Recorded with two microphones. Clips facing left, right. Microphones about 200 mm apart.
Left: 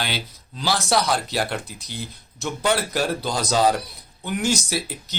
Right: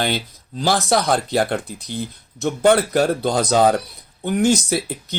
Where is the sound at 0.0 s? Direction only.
50° right (ahead or behind).